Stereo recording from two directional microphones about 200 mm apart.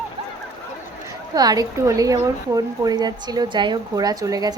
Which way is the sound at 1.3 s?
20° right (ahead or behind).